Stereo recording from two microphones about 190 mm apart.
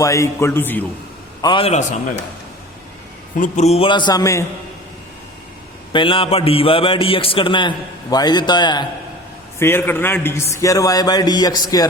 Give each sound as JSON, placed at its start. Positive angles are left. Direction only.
{"t": 0.0, "sound": "a man's voice", "side_deg": 15}
{"t": 1.4, "sound": "a man's voice", "side_deg": 25}
{"t": 3.3, "sound": "a man's voice", "side_deg": 40}
{"t": 5.9, "sound": "a man's voice", "side_deg": 25}
{"t": 9.6, "sound": "a man's voice", "side_deg": 10}